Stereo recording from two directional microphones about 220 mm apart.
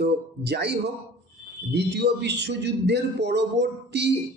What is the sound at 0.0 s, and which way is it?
A man's voice, 50° right (ahead or behind).